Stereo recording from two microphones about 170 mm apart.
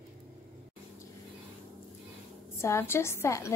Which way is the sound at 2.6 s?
15° left (ahead or behind).